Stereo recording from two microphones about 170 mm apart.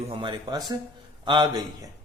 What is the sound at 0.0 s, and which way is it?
Speech, 30° right (ahead or behind).